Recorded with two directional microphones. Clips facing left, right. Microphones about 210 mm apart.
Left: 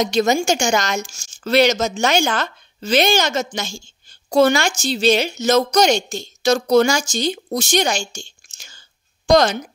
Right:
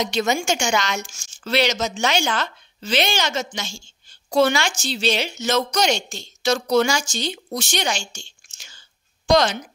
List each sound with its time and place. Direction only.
0.0 s a woman's voice: 40° left (ahead or behind)